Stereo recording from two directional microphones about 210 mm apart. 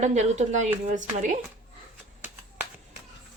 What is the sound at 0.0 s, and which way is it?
Speech, 35° right (ahead or behind).